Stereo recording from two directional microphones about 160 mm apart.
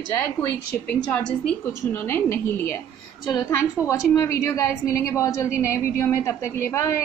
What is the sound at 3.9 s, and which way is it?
A woman's voice, 20° left (ahead or behind).